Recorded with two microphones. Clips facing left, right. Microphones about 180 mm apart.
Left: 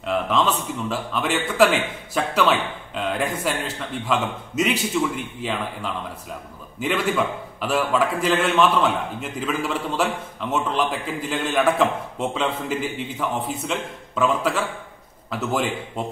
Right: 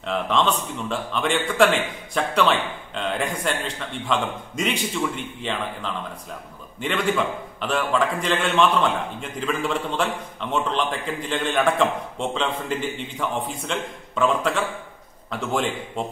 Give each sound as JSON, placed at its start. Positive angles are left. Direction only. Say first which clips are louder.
{"t": 0.0, "sound": "a man's voice", "louder": "left 1 dB", "side_deg": 0}